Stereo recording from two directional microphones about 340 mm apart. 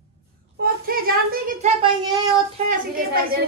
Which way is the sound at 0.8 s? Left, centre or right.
Right.